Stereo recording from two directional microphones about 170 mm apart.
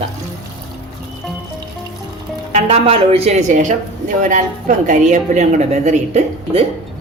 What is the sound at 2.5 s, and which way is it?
A woman's voice, 35° right (ahead or behind).